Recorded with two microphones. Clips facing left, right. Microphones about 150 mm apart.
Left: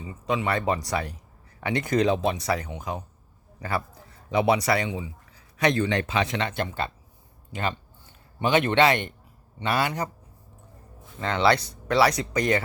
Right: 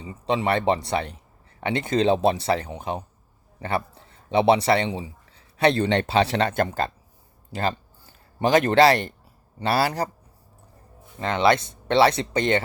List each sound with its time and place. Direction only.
0.0 s a man's voice: 30° right (ahead or behind)
11.2 s speech: 20° right (ahead or behind)